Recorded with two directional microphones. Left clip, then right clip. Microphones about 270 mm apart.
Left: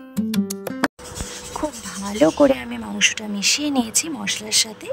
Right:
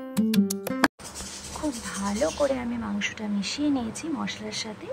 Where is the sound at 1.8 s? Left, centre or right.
Centre.